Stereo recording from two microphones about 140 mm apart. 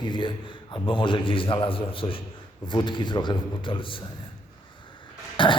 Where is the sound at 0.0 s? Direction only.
35° left (ahead or behind).